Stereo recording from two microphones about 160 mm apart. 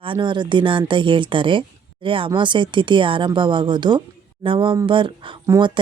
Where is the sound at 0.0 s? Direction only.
30° right (ahead or behind).